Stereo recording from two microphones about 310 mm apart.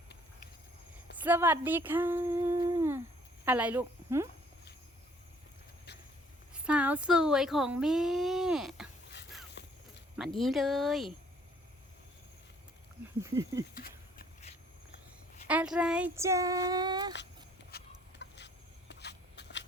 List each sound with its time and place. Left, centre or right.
1.1 s speech: centre
6.5 s speech: centre
9.6 s walk: left
10.2 s speech: centre
13.2 s child singing: centre
13.7 s a sound: left
15.4 s child singing: centre
17.7 s a sound: left